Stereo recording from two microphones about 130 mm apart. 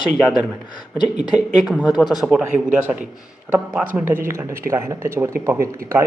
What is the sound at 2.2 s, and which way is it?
Speech, 5° right (ahead or behind).